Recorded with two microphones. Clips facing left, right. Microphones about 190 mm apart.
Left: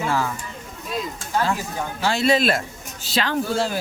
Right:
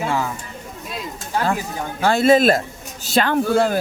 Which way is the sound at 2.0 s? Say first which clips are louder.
Right 6 dB; 50° right (ahead or behind).